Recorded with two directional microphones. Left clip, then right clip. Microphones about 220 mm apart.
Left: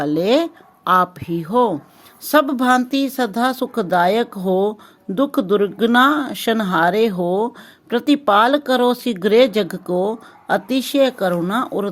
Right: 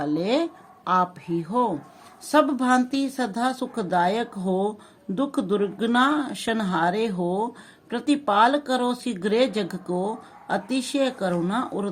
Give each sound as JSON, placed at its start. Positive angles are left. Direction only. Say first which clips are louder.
{"t": 0.0, "sound": "speech", "louder": "left 7 dB", "side_deg": 35}